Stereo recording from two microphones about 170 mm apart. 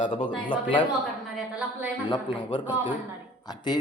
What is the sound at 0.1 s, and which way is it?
Speech, 30° left (ahead or behind).